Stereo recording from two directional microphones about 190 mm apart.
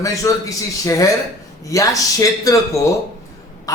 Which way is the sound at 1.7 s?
15° left (ahead or behind).